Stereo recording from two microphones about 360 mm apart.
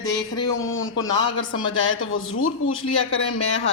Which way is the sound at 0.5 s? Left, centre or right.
Left.